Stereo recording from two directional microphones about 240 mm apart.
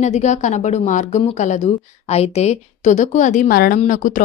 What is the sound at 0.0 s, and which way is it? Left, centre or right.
A woman's voice, left.